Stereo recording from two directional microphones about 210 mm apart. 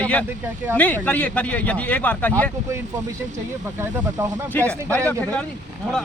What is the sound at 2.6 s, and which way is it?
Speech, 15° right (ahead or behind).